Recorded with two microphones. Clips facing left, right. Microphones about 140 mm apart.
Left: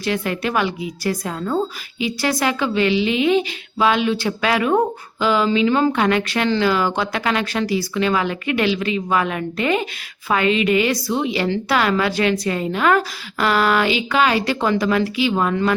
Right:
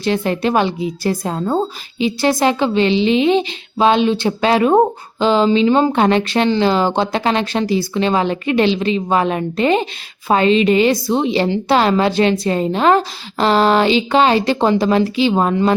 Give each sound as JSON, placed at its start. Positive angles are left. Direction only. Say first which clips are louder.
{"t": 0.0, "sound": "a woman's voice", "louder": "right 5 dB", "side_deg": -30}